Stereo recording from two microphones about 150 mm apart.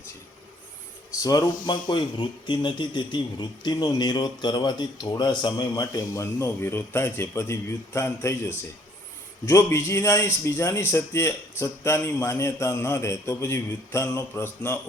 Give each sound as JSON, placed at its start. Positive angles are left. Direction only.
{"t": 1.2, "sound": "speech", "side_deg": 25}
{"t": 9.5, "sound": "speech", "side_deg": 20}